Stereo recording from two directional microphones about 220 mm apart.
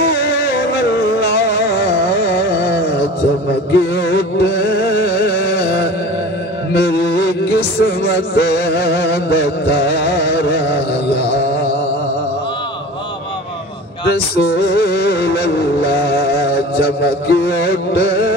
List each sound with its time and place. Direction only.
0.0 s music: 45° left (ahead or behind)
14.0 s vehicle: 45° left (ahead or behind)